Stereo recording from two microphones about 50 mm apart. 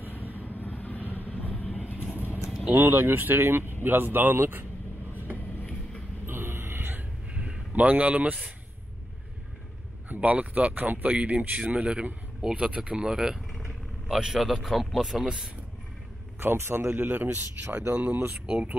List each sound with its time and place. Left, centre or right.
0.4 s vehicle: left
2.7 s speech: right
6.2 s a sound: right
7.3 s a sound: right
10.0 s speech: right
13.1 s a man's voice: centre
16.3 s speech: right
16.9 s speech: right